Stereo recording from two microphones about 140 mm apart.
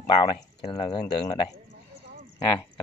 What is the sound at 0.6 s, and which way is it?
Speech, 45° left (ahead or behind).